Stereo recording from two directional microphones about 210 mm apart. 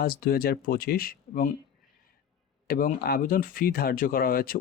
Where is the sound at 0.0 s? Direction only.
45° left (ahead or behind).